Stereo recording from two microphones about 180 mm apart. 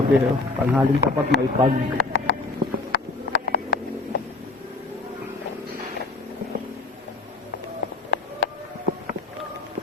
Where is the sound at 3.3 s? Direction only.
70° left (ahead or behind).